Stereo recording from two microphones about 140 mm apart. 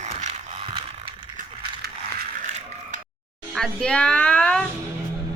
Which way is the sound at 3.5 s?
5° left (ahead or behind).